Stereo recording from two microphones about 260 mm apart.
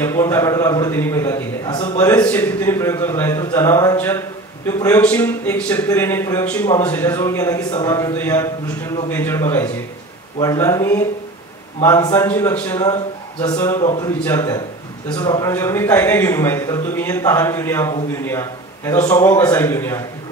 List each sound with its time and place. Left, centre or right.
0.0 s a man's voice: centre